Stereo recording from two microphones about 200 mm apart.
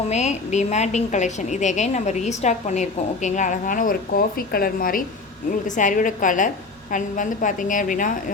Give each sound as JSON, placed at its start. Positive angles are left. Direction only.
{"t": 0.1, "sound": "a woman's voice", "side_deg": 35}